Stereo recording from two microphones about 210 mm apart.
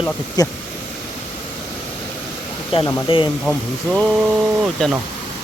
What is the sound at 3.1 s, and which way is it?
Speech, 25° left (ahead or behind).